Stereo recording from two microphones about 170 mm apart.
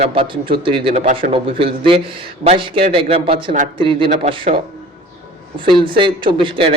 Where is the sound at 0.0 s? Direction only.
35° right (ahead or behind).